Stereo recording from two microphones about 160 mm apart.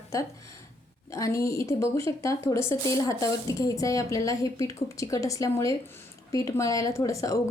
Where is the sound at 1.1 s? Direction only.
20° left (ahead or behind).